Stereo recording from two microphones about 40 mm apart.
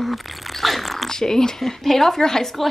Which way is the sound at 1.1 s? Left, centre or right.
Centre.